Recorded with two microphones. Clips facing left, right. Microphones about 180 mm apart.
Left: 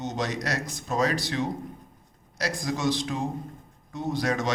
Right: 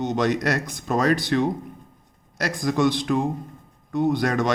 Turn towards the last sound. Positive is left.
turn(degrees=-55)  # may be behind; listen again after turning